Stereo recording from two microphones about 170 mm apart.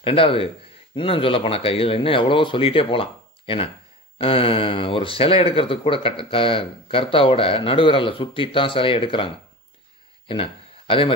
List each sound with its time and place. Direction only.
0.0 s speech: 30° left (ahead or behind)